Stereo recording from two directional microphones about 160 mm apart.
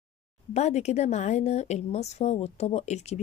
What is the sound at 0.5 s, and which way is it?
A woman's voice, 45° left (ahead or behind).